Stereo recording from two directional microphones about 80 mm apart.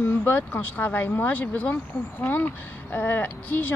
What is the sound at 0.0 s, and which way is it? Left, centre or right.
Speech, left.